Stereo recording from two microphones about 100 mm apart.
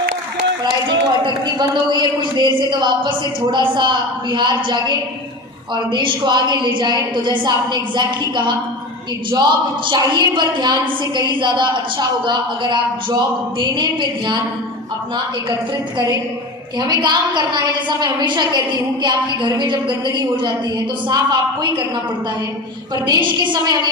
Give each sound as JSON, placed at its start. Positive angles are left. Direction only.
{"t": 0.6, "sound": "a man's voice", "side_deg": -50}
{"t": 16.8, "sound": "a man's voice", "side_deg": -45}
{"t": 23.0, "sound": "a man's voice", "side_deg": -50}